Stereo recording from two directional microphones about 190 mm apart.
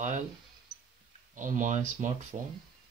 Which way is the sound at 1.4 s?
40° right (ahead or behind).